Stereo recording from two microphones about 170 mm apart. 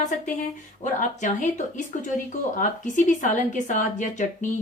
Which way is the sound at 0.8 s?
45° left (ahead or behind).